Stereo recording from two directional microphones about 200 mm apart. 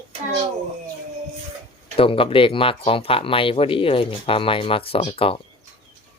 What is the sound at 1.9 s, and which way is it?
Speech, 25° left (ahead or behind).